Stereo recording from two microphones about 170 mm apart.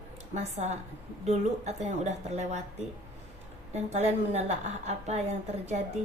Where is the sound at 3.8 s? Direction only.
40° right (ahead or behind).